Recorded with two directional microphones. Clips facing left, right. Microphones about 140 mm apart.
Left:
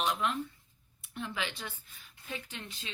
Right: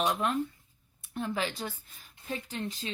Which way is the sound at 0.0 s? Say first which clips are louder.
Right 3 dB; 45° right (ahead or behind).